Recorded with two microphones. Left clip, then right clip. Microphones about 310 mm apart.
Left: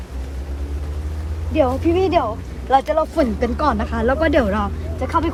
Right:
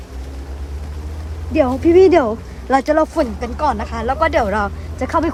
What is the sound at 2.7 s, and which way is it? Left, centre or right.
Speech, centre.